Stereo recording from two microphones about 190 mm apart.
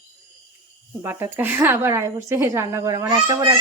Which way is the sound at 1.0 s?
10° right (ahead or behind).